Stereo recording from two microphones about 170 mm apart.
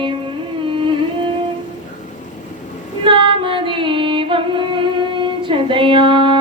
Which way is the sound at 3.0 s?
30° right (ahead or behind).